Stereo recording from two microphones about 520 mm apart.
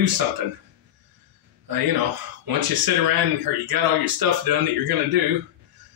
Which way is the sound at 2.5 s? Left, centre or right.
Right.